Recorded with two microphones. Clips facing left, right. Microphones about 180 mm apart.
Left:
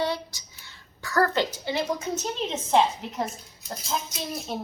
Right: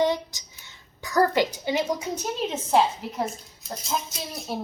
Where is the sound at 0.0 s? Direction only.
20° right (ahead or behind).